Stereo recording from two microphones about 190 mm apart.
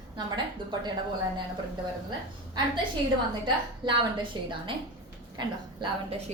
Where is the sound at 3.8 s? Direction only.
25° right (ahead or behind).